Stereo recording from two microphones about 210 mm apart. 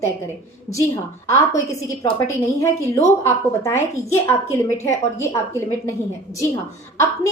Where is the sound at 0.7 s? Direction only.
15° left (ahead or behind).